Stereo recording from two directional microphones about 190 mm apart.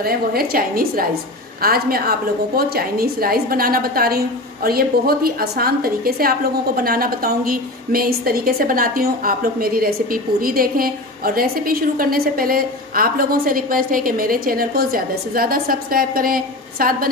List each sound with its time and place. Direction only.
0.0 s a woman's voice: 50° right (ahead or behind)